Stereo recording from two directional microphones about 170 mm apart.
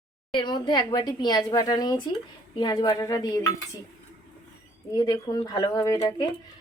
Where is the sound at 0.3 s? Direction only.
25° left (ahead or behind).